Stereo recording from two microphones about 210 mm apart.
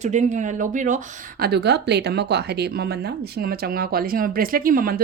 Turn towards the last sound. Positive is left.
turn(degrees=-45)  # may be behind; listen again after turning